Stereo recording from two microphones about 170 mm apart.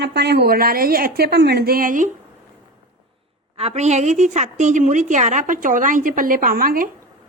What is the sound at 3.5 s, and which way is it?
A woman's voice, 40° right (ahead or behind).